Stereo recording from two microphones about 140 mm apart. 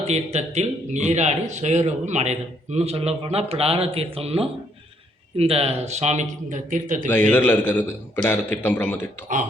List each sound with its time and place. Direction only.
0.1 s speech: 50° right (ahead or behind); by 7.1 s 70° right (ahead or behind)
7.1 s a man's voice: 10° left (ahead or behind)
9.3 s speech: 65° right (ahead or behind)